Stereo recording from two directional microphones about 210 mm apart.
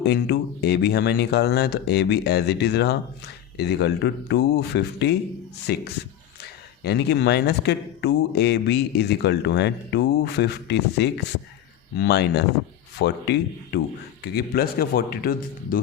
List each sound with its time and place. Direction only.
0.0 s speech: 50° left (ahead or behind)
6.8 s speech: 55° left (ahead or behind)